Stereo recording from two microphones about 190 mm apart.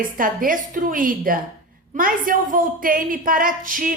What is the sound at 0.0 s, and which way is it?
A woman's voice, 45° right (ahead or behind).